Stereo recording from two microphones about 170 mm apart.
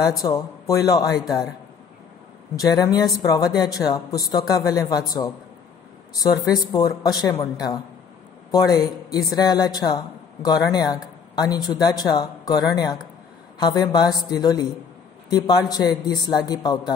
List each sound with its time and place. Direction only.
0.1 s a man's voice: 20° left (ahead or behind)
2.5 s a man's voice: 20° left (ahead or behind)
6.2 s a man's voice: 25° left (ahead or behind)